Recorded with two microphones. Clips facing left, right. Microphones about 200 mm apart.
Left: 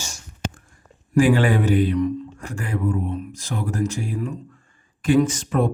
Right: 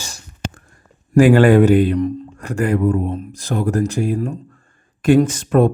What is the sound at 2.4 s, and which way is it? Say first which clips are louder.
Speech: right 11 dB; 70° right (ahead or behind).